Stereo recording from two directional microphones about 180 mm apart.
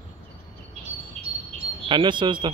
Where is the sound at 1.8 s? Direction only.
25° right (ahead or behind).